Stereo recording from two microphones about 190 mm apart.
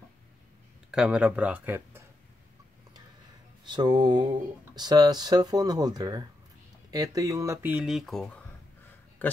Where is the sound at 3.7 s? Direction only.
25° right (ahead or behind).